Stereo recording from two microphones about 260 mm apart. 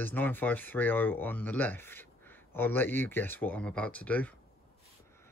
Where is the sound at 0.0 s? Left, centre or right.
Centre.